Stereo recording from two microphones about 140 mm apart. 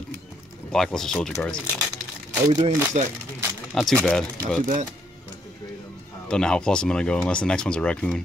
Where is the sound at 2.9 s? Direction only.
55° right (ahead or behind).